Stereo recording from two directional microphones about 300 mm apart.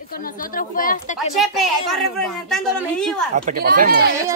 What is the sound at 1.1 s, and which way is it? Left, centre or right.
A woman's voice, centre.